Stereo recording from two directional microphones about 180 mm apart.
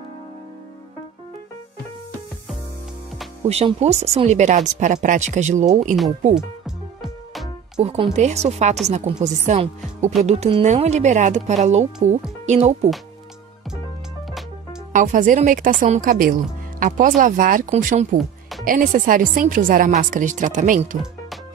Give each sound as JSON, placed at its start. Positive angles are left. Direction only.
{"t": 3.4, "sound": "speech", "side_deg": -35}
{"t": 6.3, "sound": "music", "side_deg": 0}
{"t": 7.8, "sound": "speech", "side_deg": -35}
{"t": 14.9, "sound": "speech", "side_deg": -45}